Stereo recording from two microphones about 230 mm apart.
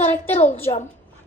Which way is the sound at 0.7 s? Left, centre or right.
Centre.